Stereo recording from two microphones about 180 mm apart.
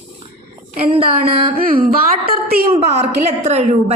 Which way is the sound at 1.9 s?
55° right (ahead or behind).